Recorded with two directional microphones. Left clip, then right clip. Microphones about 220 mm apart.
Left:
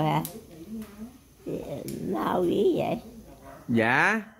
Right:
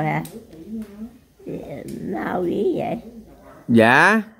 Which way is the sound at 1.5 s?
15° left (ahead or behind).